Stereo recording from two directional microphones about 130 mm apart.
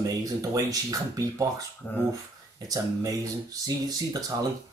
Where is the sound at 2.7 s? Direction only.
30° right (ahead or behind).